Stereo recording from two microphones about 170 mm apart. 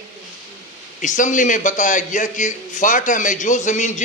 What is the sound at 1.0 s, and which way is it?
A man's voice, 50° left (ahead or behind).